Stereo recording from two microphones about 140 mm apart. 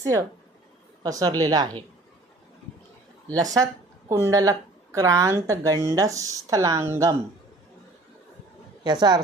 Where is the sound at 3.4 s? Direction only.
25° right (ahead or behind).